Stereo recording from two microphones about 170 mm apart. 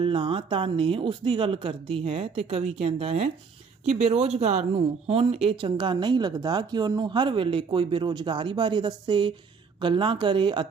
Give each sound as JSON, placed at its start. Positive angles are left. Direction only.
{"t": 0.0, "sound": "speech", "side_deg": -30}